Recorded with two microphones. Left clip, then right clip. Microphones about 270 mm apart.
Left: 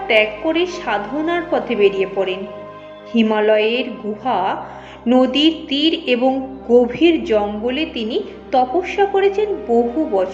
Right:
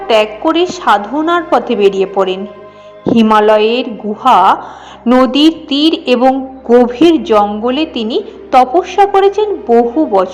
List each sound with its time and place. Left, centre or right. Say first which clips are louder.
0.1 s a woman's voice: right 5 dB; right